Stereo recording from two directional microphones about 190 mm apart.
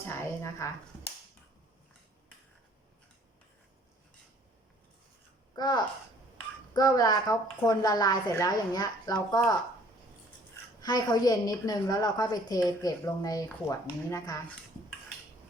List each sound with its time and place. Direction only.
0.1 s speech: 15° left (ahead or behind)
5.5 s a child's voice: 20° left (ahead or behind)
10.8 s a woman's voice: 20° left (ahead or behind)